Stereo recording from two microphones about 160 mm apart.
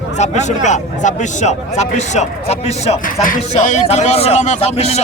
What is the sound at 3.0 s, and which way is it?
Speech, 55° left (ahead or behind).